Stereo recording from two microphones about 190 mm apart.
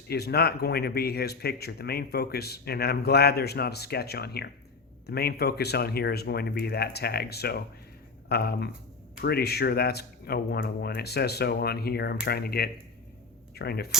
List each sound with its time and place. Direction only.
0.1 s speech: 55° left (ahead or behind)